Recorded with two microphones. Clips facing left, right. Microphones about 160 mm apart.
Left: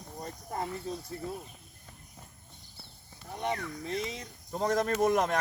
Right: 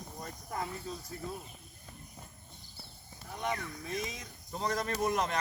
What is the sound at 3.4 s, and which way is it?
Speech, 30° left (ahead or behind).